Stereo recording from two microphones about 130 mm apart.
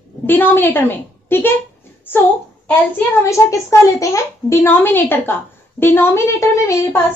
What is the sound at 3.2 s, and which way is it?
A woman's voice, 25° left (ahead or behind).